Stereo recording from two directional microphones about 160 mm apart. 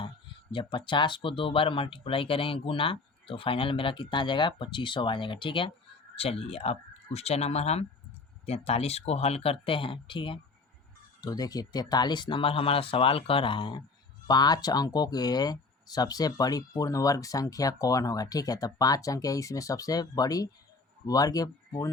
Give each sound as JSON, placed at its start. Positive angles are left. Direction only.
{"t": 0.5, "sound": "speech", "side_deg": 30}